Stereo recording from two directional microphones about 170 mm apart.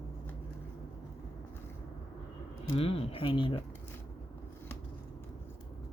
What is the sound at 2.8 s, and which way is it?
Speech, 35° left (ahead or behind).